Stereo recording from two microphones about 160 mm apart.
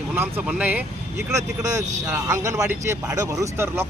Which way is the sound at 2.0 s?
15° right (ahead or behind).